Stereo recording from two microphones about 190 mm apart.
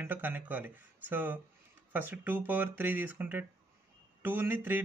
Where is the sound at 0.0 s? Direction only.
10° right (ahead or behind).